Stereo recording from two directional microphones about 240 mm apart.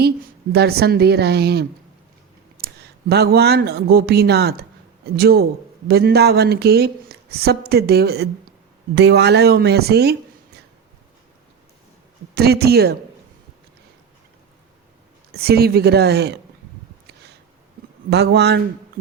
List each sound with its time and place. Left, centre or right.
0.5 s speech: right
12.3 s speech: right
15.3 s speech: right
18.1 s speech: right